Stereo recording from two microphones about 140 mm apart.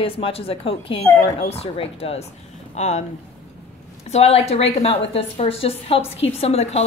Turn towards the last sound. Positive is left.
turn(degrees=50)  # may be behind; listen again after turning